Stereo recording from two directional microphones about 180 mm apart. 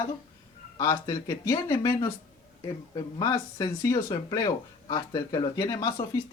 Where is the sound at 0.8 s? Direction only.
25° left (ahead or behind).